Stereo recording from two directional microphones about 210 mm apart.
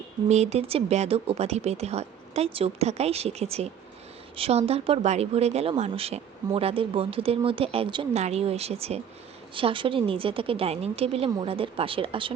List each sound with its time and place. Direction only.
0.3 s speech: 30° right (ahead or behind)